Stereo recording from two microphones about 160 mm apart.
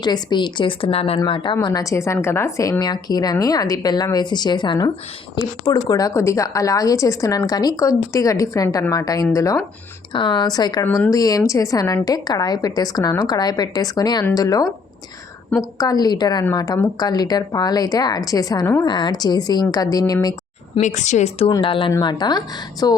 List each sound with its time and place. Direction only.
0.0 s a woman's voice: 25° left (ahead or behind)
15.8 s a woman's voice: 25° left (ahead or behind)
20.8 s a woman's voice: 50° left (ahead or behind); by 23.0 s 25° left (ahead or behind)